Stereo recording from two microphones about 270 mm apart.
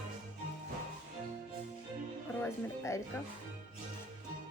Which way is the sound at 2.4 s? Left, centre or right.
Centre.